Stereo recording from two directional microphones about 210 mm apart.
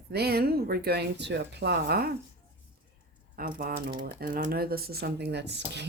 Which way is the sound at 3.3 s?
40° right (ahead or behind).